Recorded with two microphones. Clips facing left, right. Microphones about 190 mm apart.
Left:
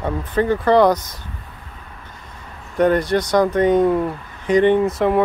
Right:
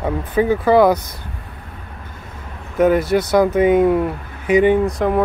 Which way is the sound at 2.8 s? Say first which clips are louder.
Right 2 dB; 5° right (ahead or behind).